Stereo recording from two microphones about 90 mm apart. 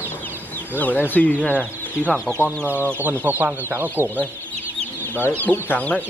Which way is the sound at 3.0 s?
20° right (ahead or behind).